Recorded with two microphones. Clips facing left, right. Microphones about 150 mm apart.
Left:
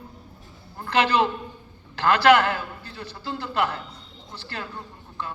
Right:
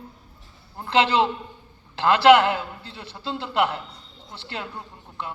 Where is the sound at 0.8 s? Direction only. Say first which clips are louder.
Right 1 dB; 25° right (ahead or behind).